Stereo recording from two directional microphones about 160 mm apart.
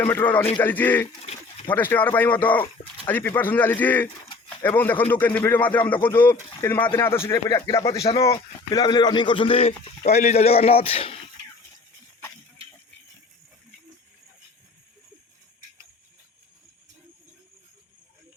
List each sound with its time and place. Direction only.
0.0 s a man's voice: 15° left (ahead or behind)
1.2 s a sound: 40° left (ahead or behind)
1.7 s a man's voice: 10° left (ahead or behind); by 11.1 s 35° left (ahead or behind)